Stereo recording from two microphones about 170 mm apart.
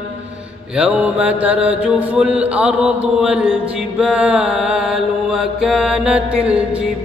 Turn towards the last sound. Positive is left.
turn(degrees=-5)  # may be behind; listen again after turning